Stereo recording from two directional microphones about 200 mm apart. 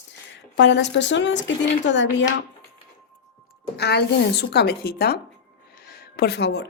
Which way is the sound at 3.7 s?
55° left (ahead or behind).